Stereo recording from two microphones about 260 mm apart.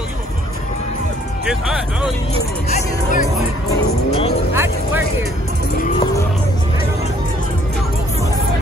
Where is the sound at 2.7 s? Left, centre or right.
Left.